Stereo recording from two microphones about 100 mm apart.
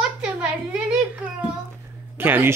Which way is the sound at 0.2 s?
10° right (ahead or behind).